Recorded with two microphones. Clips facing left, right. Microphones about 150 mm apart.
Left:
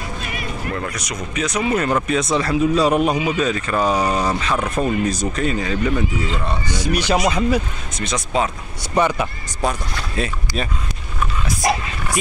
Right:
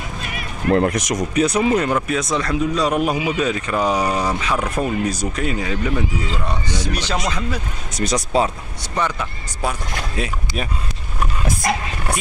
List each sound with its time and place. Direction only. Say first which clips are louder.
0.7 s speech: right 11 dB; 60° right (ahead or behind)
1.1 s speech: right 2 dB; 35° right (ahead or behind)
2.0 s a man's voice: left 2 dB; centre (ahead or behind)
6.7 s speech: left 7 dB; 10° left (ahead or behind)
7.9 s speech: right 3 dB; 40° right (ahead or behind)
8.9 s speech: left 5 dB; 10° left (ahead or behind)
10.1 s speech: left 3 dB; 10° right (ahead or behind)